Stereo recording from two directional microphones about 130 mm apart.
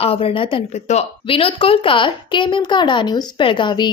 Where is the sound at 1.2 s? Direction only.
45° left (ahead or behind).